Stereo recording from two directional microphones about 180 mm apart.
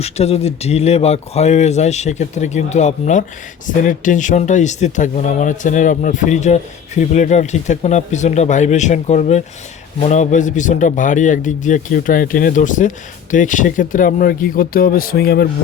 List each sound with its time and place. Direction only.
0.0 s speech: 35° left (ahead or behind); by 15.4 s 60° left (ahead or behind)